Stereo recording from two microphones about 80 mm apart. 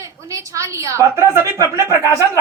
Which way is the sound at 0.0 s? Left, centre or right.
Right.